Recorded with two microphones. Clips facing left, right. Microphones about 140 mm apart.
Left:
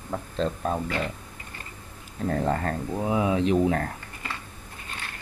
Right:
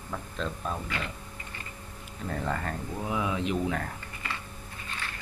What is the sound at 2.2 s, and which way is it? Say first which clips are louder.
Speech: left 7 dB; 40° left (ahead or behind).